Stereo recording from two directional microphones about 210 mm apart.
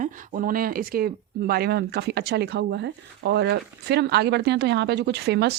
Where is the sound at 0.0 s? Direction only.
40° right (ahead or behind).